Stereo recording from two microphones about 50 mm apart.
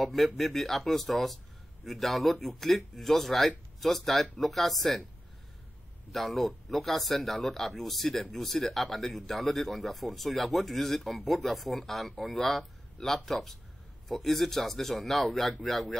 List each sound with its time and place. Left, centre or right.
0.0 s speech: centre
6.1 s speech: centre